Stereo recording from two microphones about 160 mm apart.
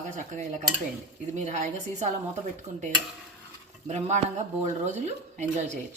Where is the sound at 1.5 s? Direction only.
45° right (ahead or behind).